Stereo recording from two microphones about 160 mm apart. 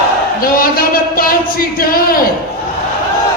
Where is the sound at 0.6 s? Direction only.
65° left (ahead or behind).